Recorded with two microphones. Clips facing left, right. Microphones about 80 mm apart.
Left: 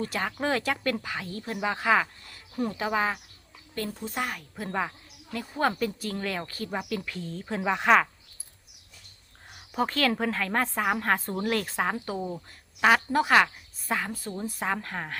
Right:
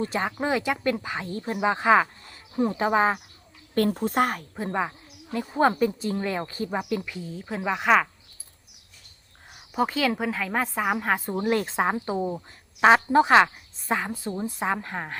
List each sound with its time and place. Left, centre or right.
0.0 s a woman's voice: right
0.3 s a woman's voice: centre
1.0 s a woman's voice: right
2.8 s speech: right
3.8 s speech: right
4.7 s a woman's voice: centre
9.5 s a woman's voice: centre